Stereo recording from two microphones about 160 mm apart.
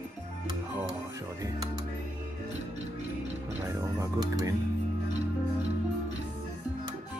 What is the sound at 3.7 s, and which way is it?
Music, 20° right (ahead or behind).